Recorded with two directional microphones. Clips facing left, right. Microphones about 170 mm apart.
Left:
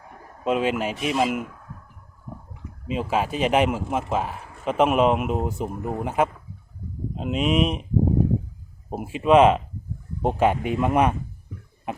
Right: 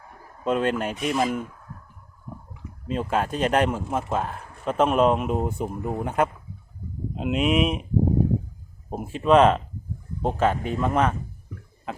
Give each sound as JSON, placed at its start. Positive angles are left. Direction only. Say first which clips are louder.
{"t": 0.4, "sound": "speech", "louder": "left 1 dB", "side_deg": 5}
{"t": 2.8, "sound": "speech", "louder": "left 1 dB", "side_deg": 5}
{"t": 8.9, "sound": "speech", "louder": "left 1 dB", "side_deg": 10}
{"t": 11.9, "sound": "a sound", "louder": "left 2 dB", "side_deg": 20}